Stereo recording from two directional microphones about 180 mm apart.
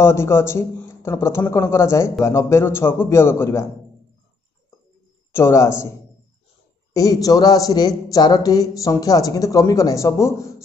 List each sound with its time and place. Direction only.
0.0 s speech: 15° left (ahead or behind)
5.3 s speech: 15° left (ahead or behind)
6.9 s speech: 20° left (ahead or behind)